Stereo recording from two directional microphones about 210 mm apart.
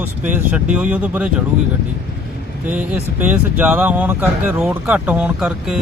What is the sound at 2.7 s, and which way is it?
Speech, 5° right (ahead or behind).